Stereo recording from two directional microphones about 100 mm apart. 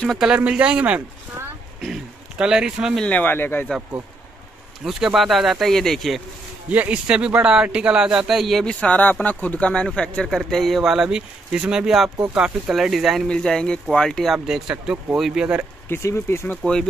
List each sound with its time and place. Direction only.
0.4 s speech: 10° right (ahead or behind)
2.3 s speech: 10° right (ahead or behind)
3.1 s speech: 20° left (ahead or behind)
4.8 s speech: 5° right (ahead or behind)
6.7 s speech: 15° right (ahead or behind)
8.8 s speech: 15° left (ahead or behind); by 13.3 s centre (ahead or behind)
13.3 s speech: 10° left (ahead or behind)
15.9 s speech: 25° left (ahead or behind)